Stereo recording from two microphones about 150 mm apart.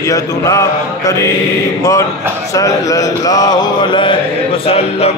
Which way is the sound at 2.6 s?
20° left (ahead or behind).